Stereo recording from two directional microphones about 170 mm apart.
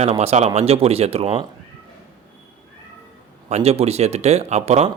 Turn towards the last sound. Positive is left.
turn(degrees=-40)  # may be behind; listen again after turning